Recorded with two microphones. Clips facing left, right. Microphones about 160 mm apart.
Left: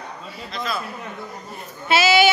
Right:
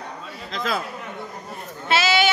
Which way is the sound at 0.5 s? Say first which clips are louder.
Right 2 dB; 90° right.